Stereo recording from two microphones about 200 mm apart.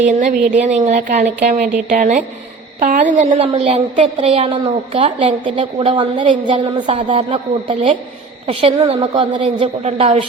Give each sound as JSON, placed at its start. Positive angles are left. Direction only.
{"t": 0.0, "sound": "a woman's voice", "side_deg": -35}